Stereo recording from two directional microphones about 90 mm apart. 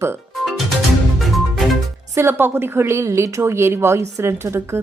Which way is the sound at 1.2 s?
Centre (ahead or behind).